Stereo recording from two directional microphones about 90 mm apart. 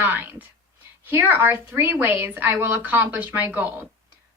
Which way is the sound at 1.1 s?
20° right (ahead or behind).